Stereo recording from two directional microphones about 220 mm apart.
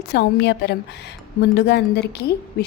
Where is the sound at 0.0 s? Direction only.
50° left (ahead or behind).